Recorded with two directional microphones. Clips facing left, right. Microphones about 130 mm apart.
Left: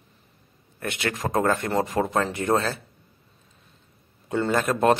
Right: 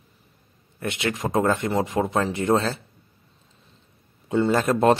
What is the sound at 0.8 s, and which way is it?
Speech, 25° right (ahead or behind).